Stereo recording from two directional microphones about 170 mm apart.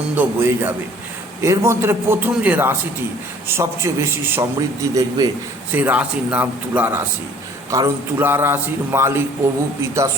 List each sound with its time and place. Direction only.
0.2 s a man's voice: 10° right (ahead or behind)
5.7 s a man's voice: 10° right (ahead or behind)